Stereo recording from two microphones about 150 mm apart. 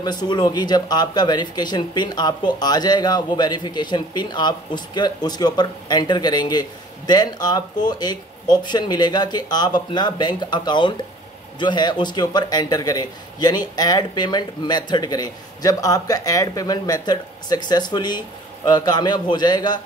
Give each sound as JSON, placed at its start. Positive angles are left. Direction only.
{"t": 0.0, "sound": "speech", "side_deg": 30}